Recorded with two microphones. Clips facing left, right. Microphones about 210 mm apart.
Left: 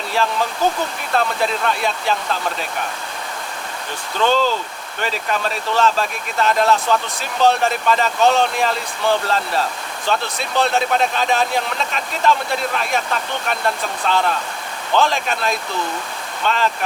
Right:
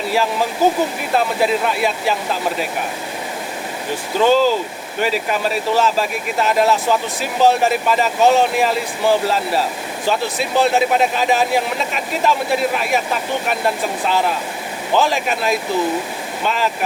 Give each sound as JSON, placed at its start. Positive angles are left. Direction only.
{"t": 0.1, "sound": "speech", "side_deg": -5}
{"t": 4.1, "sound": "speech", "side_deg": -5}